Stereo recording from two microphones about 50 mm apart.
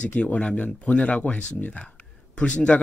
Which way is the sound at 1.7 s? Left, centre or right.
Left.